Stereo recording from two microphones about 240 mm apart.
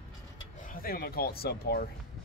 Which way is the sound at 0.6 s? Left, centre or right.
Left.